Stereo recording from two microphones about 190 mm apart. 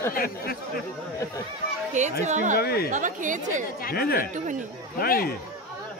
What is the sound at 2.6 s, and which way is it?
Speech, 55° left (ahead or behind).